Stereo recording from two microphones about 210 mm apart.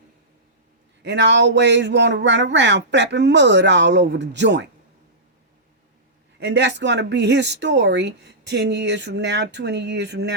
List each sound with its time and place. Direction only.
1.0 s speech: 55° right (ahead or behind)
6.4 s speech: 55° right (ahead or behind)